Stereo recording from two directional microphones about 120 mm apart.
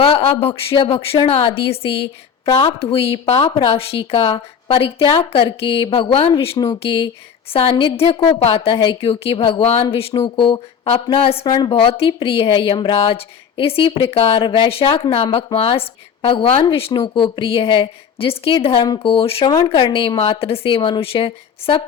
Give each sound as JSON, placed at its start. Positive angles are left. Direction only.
{"t": 0.0, "sound": "a woman's voice", "side_deg": 55}
{"t": 11.4, "sound": "speech", "side_deg": 35}
{"t": 11.7, "sound": "a woman's voice", "side_deg": 50}
{"t": 14.3, "sound": "a woman's voice", "side_deg": 40}